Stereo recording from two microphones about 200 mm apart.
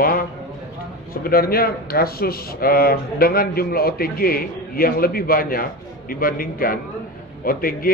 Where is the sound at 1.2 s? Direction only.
50° left (ahead or behind).